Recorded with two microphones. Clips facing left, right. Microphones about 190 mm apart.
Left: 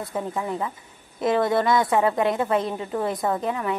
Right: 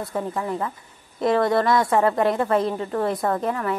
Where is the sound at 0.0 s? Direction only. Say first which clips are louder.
Right 1 dB; centre (ahead or behind).